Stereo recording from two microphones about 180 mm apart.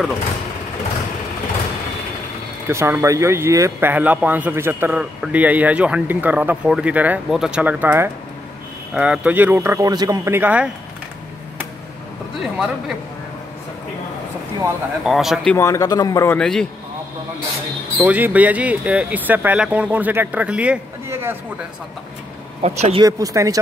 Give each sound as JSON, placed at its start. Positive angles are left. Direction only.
{"t": 2.7, "sound": "speech", "side_deg": -15}
{"t": 12.4, "sound": "speech", "side_deg": 0}
{"t": 15.0, "sound": "speech", "side_deg": 0}
{"t": 15.5, "sound": "a man's voice", "side_deg": 15}
{"t": 16.3, "sound": "speech", "side_deg": 5}
{"t": 17.9, "sound": "speech", "side_deg": -10}
{"t": 22.6, "sound": "speech", "side_deg": -35}
{"t": 23.0, "sound": "speech", "side_deg": -20}